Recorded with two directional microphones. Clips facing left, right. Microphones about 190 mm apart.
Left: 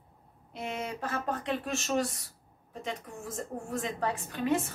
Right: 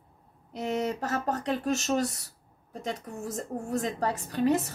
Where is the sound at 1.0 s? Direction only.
40° right (ahead or behind).